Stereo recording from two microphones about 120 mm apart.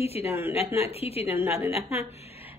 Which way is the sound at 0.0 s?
60° left (ahead or behind).